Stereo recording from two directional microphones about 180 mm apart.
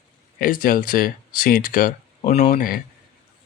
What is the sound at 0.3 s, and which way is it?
Speech, 50° left (ahead or behind).